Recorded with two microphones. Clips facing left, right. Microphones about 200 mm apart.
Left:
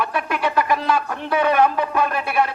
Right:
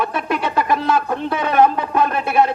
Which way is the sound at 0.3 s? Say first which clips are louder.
Even; 25° right (ahead or behind).